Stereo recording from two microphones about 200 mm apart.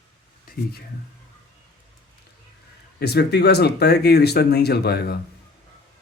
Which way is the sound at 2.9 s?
55° left (ahead or behind).